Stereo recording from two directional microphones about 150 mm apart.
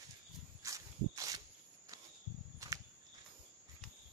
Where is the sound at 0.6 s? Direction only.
20° right (ahead or behind).